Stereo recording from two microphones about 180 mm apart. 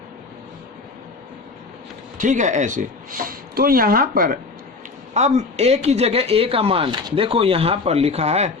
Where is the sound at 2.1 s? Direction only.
45° right (ahead or behind).